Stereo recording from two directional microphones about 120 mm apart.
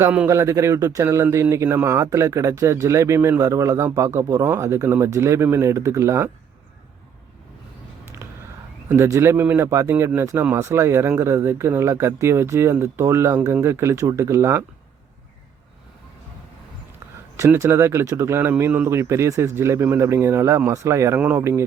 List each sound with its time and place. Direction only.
0.3 s speech: 25° right (ahead or behind)
9.0 s speech: 25° right (ahead or behind)
17.3 s speech: 25° right (ahead or behind)